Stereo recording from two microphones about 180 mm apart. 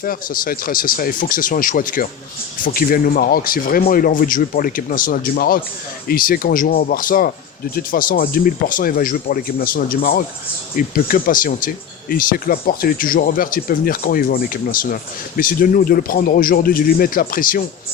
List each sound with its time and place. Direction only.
0.0 s speech: 50° left (ahead or behind)